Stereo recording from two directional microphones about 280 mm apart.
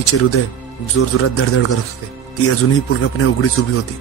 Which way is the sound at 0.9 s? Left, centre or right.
Left.